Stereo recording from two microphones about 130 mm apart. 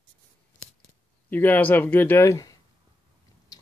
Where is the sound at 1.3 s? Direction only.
15° left (ahead or behind).